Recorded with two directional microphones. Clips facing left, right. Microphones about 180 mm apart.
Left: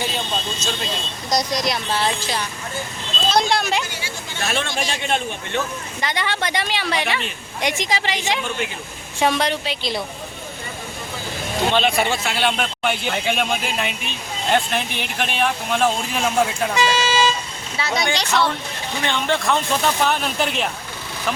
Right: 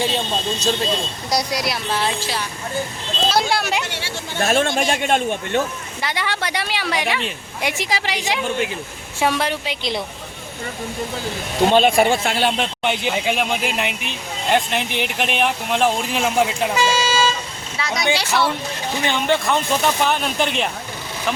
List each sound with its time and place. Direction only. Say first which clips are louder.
0.0 s speech: right 4 dB; 30° right (ahead or behind)
1.3 s speech: left 1 dB; 10° right (ahead or behind)
4.4 s a man's voice: right 6 dB; 45° right (ahead or behind)
6.0 s speech: even; 5° right (ahead or behind)
11.7 s a man's voice: right 5 dB; 45° right (ahead or behind)
12.5 s speech: right 1 dB; 20° right (ahead or behind)
13.8 s speech: right 1 dB; 65° right (ahead or behind)
14.5 s speech: right 1 dB; 15° right (ahead or behind)
16.8 s toot: left 1 dB; 5° right (ahead or behind)
17.7 s speech: right 1 dB; centre (ahead or behind)